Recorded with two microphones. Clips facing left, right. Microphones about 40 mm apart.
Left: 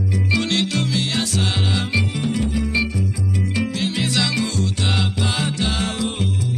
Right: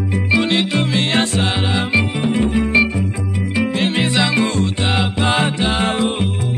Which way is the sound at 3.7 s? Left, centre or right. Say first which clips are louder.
Right 5 dB; right.